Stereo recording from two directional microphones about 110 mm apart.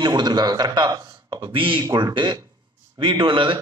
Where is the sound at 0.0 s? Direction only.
40° right (ahead or behind).